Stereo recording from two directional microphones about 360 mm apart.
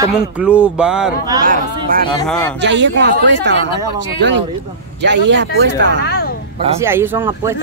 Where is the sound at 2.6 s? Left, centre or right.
Right.